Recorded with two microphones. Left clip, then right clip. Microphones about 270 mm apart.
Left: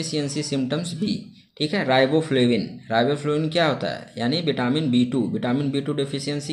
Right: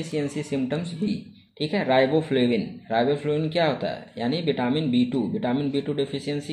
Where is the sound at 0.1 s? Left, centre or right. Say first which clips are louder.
Even; centre.